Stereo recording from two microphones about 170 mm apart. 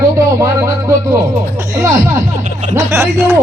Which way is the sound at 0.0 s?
20° right (ahead or behind).